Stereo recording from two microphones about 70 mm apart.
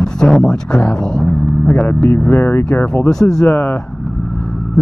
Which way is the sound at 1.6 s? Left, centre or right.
Left.